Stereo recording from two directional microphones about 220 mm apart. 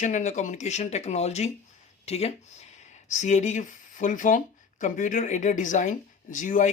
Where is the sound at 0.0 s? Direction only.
35° left (ahead or behind).